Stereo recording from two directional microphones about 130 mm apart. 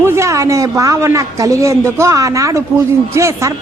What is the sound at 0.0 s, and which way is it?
A woman's voice, 20° right (ahead or behind).